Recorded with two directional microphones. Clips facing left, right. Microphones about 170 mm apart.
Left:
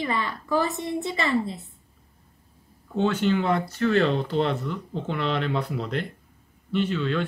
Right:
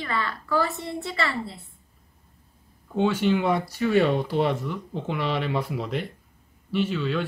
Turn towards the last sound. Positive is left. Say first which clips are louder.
# even
turn(degrees=-5)  # may be behind; listen again after turning